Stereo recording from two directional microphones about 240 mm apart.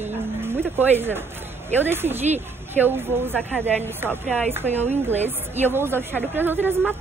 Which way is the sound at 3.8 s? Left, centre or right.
Centre.